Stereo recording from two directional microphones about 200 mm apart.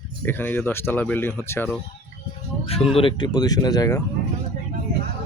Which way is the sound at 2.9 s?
25° left (ahead or behind).